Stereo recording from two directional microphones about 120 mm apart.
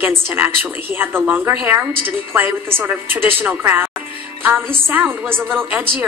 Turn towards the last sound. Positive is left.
turn(degrees=-15)  # may be behind; listen again after turning